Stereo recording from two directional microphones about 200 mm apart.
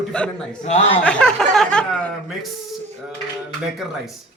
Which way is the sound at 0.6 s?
35° left (ahead or behind).